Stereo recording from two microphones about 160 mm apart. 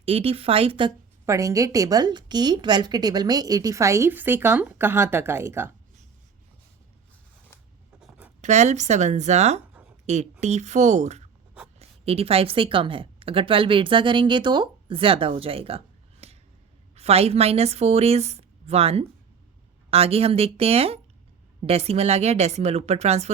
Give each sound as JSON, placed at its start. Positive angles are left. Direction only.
{"t": 0.0, "sound": "a woman's voice", "side_deg": -40}
{"t": 1.2, "sound": "a woman's voice", "side_deg": -20}
{"t": 8.0, "sound": "writing", "side_deg": -5}
{"t": 8.4, "sound": "a woman's voice", "side_deg": -45}
{"t": 16.2, "sound": "a sound", "side_deg": -40}
{"t": 16.9, "sound": "a woman's voice", "side_deg": -40}